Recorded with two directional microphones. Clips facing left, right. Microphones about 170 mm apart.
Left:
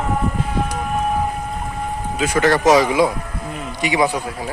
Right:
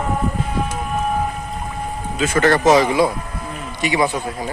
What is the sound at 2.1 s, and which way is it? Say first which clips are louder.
A man's voice: right 1 dB; 10° left (ahead or behind).